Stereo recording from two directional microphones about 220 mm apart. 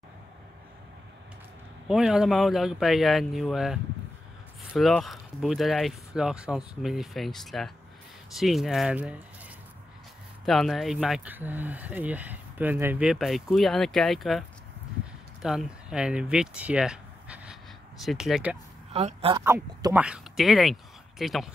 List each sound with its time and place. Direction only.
1.9 s speech: centre (ahead or behind)
10.4 s speech: centre (ahead or behind)
15.4 s speech: centre (ahead or behind)
18.9 s speech: 25° right (ahead or behind)
19.4 s speech: 10° right (ahead or behind)